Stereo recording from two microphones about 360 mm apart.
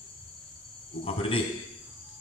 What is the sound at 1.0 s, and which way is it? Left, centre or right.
Speech, centre.